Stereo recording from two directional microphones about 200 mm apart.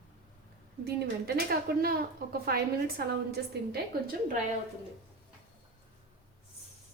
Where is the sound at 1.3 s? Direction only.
50° right (ahead or behind).